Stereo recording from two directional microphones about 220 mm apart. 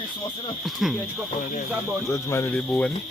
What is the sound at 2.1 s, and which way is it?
Speech, 10° left (ahead or behind).